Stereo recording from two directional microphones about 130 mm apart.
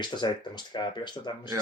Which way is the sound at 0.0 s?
35° left (ahead or behind).